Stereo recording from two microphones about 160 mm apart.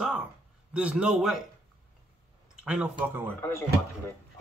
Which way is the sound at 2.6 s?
5° right (ahead or behind).